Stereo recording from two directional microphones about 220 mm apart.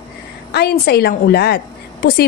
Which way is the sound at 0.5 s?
45° left (ahead or behind).